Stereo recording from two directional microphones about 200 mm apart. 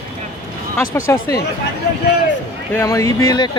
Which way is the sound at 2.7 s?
15° left (ahead or behind).